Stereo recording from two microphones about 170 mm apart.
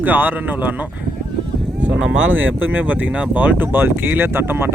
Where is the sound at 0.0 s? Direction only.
10° right (ahead or behind).